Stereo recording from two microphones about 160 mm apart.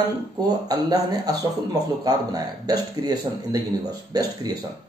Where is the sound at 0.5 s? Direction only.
25° right (ahead or behind).